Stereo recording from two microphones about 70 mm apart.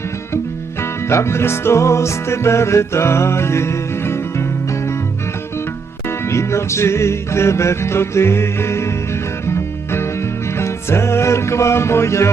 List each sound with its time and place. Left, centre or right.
0.8 s music: left
6.1 s music: left